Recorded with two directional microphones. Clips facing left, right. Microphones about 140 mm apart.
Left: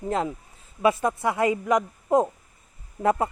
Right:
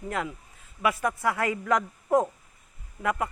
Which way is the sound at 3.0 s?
30° left (ahead or behind).